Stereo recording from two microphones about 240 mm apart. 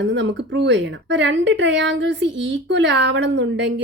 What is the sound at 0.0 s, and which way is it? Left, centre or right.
Speech, right.